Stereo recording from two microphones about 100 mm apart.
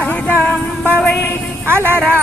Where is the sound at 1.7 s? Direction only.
20° right (ahead or behind).